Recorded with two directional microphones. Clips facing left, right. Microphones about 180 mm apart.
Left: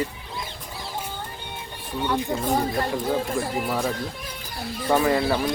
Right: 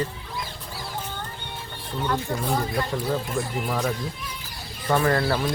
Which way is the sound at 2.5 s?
30° left (ahead or behind).